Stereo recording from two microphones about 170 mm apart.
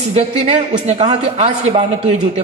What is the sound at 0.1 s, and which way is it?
A man's voice, 40° right (ahead or behind).